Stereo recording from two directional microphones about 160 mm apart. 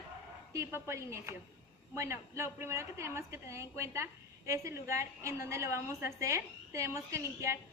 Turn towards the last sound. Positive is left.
turn(degrees=-20)  # may be behind; listen again after turning